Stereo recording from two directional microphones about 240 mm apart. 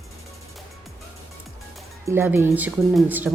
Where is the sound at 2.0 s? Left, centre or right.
Centre.